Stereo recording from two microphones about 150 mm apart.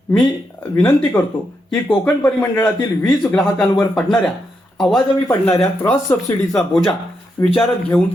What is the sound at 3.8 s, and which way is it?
Speech, 5° left (ahead or behind).